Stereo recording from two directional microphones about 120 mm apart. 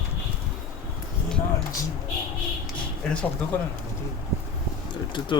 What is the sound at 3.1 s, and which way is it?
Speech, 10° left (ahead or behind).